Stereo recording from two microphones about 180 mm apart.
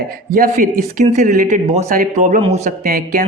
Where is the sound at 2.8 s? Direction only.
55° right (ahead or behind).